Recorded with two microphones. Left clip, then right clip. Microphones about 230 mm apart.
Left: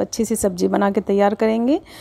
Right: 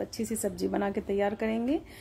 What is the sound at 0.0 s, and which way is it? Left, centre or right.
Speech, left.